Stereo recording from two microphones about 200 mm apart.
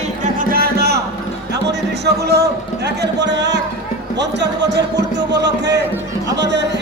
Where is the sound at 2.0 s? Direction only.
55° right (ahead or behind).